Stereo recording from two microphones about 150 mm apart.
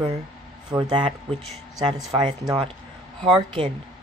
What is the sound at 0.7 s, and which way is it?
Speech, 30° right (ahead or behind).